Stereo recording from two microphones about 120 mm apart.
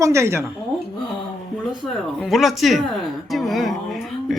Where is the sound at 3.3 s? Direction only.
Centre (ahead or behind).